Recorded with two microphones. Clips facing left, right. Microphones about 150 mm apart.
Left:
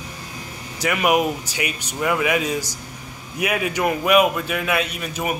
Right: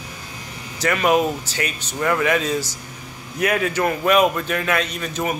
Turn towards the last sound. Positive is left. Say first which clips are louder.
# right 1 dB
turn(degrees=10)  # may be behind; listen again after turning